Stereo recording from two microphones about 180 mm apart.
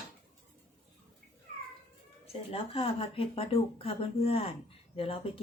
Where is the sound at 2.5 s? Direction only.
30° left (ahead or behind).